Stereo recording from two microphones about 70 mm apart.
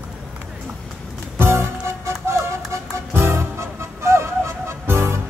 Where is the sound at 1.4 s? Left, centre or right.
Right.